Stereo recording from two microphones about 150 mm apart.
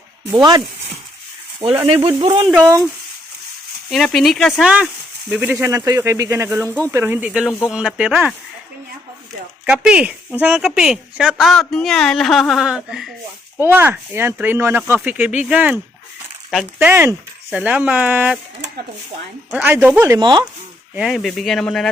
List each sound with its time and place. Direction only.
1.9 s speech: 35° right (ahead or behind)
2.6 s speech: 20° right (ahead or behind)
3.9 s speech: centre (ahead or behind)
5.3 s speech: 10° right (ahead or behind)
6.7 s speech: 10° left (ahead or behind)
6.9 s speech: 15° right (ahead or behind)
9.6 s speech: 5° right (ahead or behind)
13.6 s speech: 15° right (ahead or behind)
19.5 s speech: 10° right (ahead or behind)
20.1 s speech: 30° right (ahead or behind)
20.9 s speech: centre (ahead or behind)